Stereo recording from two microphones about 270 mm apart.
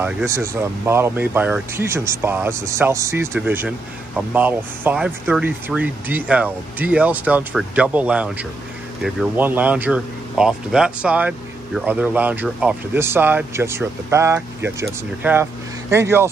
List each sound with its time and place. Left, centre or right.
0.0 s speech: centre